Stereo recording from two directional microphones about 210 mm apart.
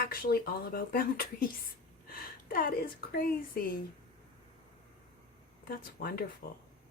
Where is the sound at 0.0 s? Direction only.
45° left (ahead or behind).